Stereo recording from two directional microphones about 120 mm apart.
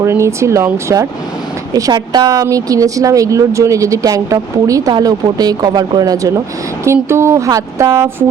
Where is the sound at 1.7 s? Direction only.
35° right (ahead or behind).